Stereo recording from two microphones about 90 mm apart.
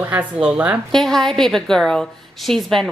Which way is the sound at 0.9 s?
5° left (ahead or behind).